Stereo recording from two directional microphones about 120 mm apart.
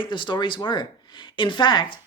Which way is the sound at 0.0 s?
40° left (ahead or behind).